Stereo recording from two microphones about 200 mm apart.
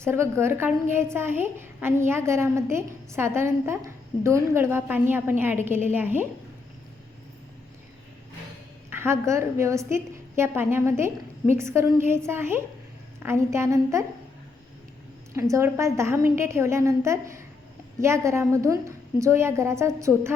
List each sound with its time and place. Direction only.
0.0 s a woman's voice: 15° right (ahead or behind)
8.9 s a woman's voice: 10° right (ahead or behind)
15.3 s a woman's voice: 15° right (ahead or behind)